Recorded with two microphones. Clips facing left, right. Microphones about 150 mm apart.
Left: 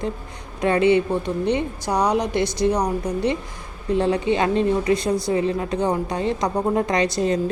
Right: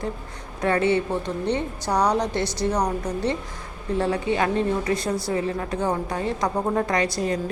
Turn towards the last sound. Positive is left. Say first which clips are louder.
# left 3 dB
turn(degrees=20)  # may be behind; listen again after turning